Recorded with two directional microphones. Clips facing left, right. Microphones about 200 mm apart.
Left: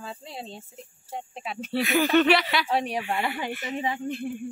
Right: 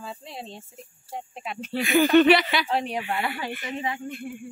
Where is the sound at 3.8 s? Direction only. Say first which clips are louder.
Left 4 dB; 30° left (ahead or behind).